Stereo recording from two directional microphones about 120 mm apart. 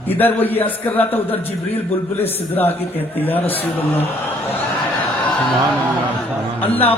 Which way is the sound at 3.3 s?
55° left (ahead or behind).